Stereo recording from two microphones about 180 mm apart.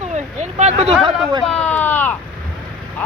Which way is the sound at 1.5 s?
5° left (ahead or behind).